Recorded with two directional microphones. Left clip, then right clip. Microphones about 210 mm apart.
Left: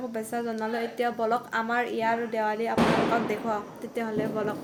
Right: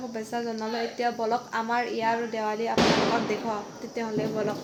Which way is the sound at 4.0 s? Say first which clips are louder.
Even; 5° left (ahead or behind).